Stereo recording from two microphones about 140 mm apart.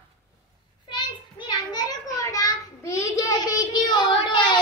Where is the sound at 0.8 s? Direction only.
35° left (ahead or behind).